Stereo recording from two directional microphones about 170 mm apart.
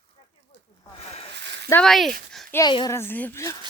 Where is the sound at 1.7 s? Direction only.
5° left (ahead or behind).